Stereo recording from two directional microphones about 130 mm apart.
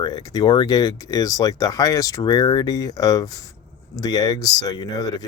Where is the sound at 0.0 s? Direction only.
30° left (ahead or behind).